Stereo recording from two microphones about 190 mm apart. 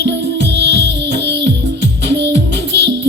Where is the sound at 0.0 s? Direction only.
65° right (ahead or behind).